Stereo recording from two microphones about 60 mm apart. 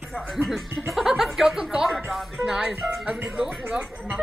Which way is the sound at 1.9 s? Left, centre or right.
Centre.